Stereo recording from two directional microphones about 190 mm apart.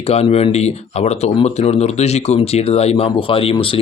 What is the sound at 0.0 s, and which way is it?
Speech, 35° left (ahead or behind).